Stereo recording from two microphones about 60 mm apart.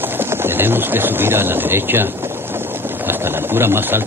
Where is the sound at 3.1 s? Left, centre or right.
Right.